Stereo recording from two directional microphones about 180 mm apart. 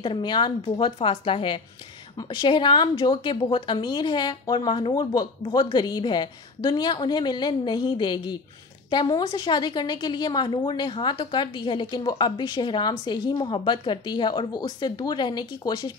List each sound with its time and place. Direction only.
0.0 s a woman's voice: 25° left (ahead or behind)